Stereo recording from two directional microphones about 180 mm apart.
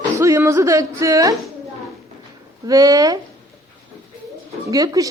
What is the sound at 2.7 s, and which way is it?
Speech, 20° right (ahead or behind).